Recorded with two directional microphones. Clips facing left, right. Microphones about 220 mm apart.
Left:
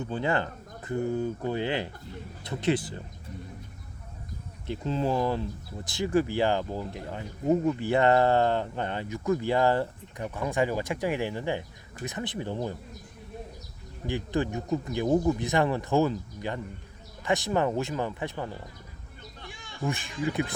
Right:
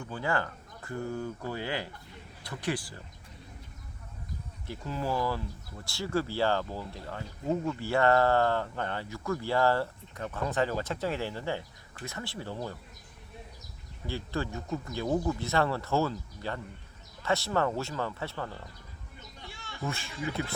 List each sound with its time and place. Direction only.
0.0 s speech: 20° left (ahead or behind)
4.6 s speech: 20° left (ahead or behind)
14.1 s speech: 20° left (ahead or behind)